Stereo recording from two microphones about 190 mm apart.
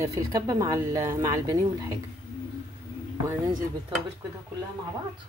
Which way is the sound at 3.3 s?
25° right (ahead or behind).